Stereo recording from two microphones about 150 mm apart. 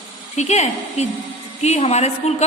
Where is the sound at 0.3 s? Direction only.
50° left (ahead or behind).